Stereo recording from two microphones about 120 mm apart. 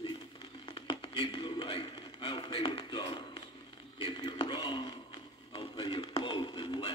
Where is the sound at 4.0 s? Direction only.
40° left (ahead or behind).